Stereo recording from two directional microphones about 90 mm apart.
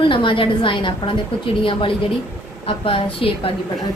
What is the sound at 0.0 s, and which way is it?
A woman's voice, 65° left (ahead or behind).